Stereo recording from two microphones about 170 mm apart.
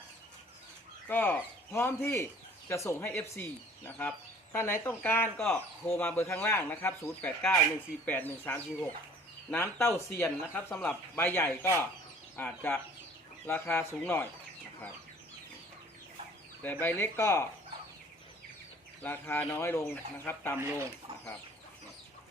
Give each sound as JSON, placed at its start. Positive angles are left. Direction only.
{"t": 1.0, "sound": "speech", "side_deg": 10}
{"t": 16.6, "sound": "speech", "side_deg": 10}
{"t": 19.0, "sound": "speech", "side_deg": 10}
{"t": 20.6, "sound": "speech", "side_deg": -15}